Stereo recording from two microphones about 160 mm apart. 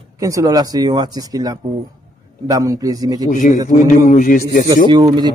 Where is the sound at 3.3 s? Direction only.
55° left (ahead or behind).